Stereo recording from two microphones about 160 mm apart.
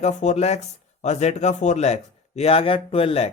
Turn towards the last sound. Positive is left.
turn(degrees=40)  # may be behind; listen again after turning